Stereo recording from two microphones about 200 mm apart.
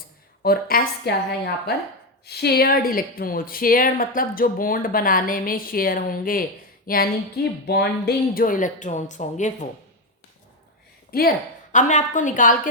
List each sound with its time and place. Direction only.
0.4 s speech: 50° left (ahead or behind)
6.8 s female singing: 45° left (ahead or behind)
7.7 s speech: 55° left (ahead or behind); by 9.6 s 35° left (ahead or behind)
11.1 s speech: 45° left (ahead or behind)